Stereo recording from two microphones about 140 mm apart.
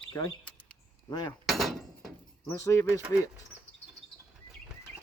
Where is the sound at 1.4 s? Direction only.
Centre (ahead or behind).